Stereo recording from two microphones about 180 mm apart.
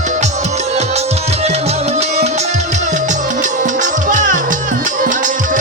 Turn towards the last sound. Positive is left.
turn(degrees=-45)  # may be behind; listen again after turning